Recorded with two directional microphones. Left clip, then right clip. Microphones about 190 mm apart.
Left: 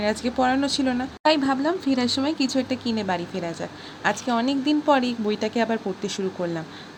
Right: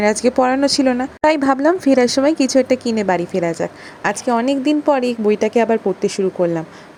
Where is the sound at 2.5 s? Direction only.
30° right (ahead or behind).